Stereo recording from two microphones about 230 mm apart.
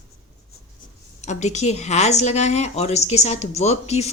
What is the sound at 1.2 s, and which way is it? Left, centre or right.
A woman's voice, left.